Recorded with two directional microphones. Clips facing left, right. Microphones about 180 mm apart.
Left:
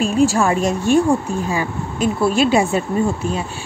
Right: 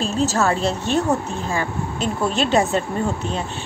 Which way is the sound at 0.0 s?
10° left (ahead or behind).